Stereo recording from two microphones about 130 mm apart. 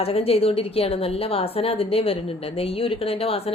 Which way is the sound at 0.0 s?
50° left (ahead or behind).